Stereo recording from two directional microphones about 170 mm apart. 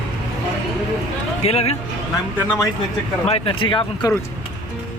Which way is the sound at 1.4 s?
40° left (ahead or behind).